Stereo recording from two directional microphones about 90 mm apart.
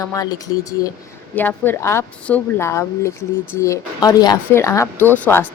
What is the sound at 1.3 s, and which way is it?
A man's voice, 20° left (ahead or behind).